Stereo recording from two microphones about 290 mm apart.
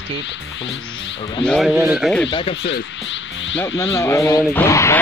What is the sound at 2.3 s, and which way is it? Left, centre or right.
Speech, centre.